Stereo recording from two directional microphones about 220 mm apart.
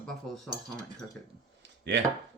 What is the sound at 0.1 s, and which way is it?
Cutlery, centre (ahead or behind).